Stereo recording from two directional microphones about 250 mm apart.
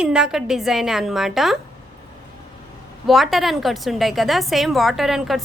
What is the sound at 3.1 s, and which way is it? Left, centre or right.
A woman's voice, centre.